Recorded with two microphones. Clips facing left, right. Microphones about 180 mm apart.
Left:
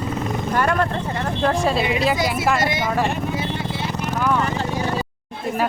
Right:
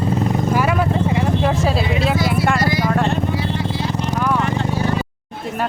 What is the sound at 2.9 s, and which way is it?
Speech, 5° left (ahead or behind).